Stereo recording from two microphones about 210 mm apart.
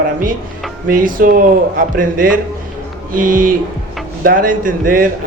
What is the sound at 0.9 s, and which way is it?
Speech, 40° right (ahead or behind).